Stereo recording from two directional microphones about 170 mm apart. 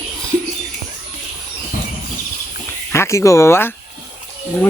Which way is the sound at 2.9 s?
15° left (ahead or behind).